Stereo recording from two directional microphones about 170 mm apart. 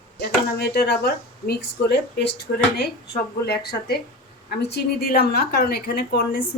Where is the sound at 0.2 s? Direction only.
70° left (ahead or behind).